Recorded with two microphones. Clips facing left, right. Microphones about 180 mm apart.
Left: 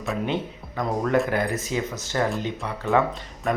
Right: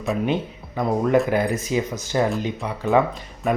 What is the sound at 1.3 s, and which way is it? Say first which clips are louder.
Speech: right 4 dB; 15° right (ahead or behind).